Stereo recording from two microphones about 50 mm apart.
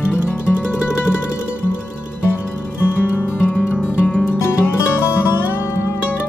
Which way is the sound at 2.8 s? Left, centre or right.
Left.